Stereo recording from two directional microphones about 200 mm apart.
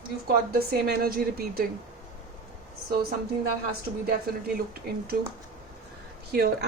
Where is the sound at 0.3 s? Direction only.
50° right (ahead or behind).